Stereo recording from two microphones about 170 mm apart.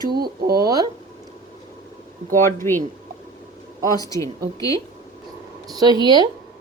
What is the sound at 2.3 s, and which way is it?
Speech, 15° left (ahead or behind).